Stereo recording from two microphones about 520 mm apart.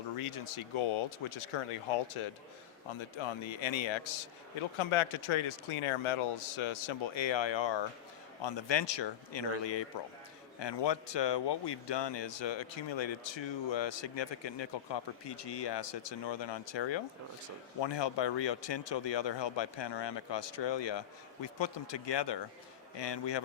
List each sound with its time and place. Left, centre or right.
0.2 s speech: left